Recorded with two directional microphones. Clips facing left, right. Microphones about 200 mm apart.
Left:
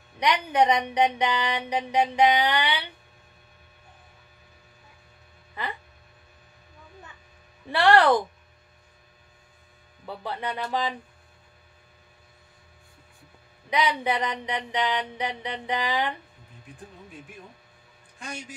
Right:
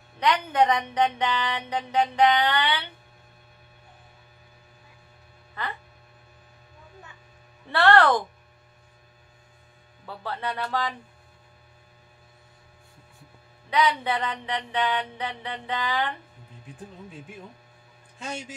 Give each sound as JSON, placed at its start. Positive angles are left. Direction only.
{"t": 0.2, "sound": "speech", "side_deg": 15}
{"t": 7.7, "sound": "speech", "side_deg": 15}
{"t": 10.0, "sound": "speech", "side_deg": 15}
{"t": 13.7, "sound": "speech", "side_deg": 15}